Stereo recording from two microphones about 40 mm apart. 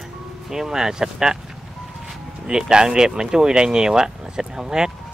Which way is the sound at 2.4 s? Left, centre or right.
Centre.